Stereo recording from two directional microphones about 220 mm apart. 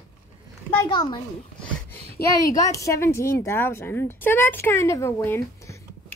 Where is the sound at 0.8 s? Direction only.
20° left (ahead or behind).